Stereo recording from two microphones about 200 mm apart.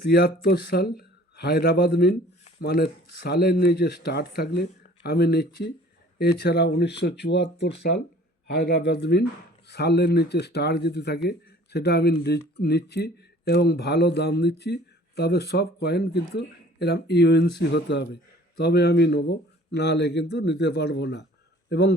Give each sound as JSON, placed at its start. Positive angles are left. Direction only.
{"t": 0.0, "sound": "a man's voice", "side_deg": 50}